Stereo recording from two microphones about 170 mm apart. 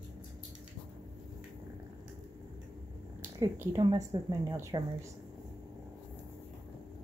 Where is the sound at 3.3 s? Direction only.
15° right (ahead or behind).